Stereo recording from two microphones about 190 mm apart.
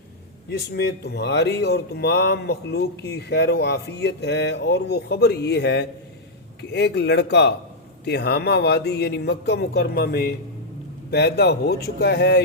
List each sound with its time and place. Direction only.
0.5 s speech: 60° left (ahead or behind)